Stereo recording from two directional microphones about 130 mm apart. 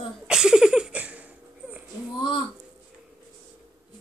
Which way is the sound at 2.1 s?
35° left (ahead or behind).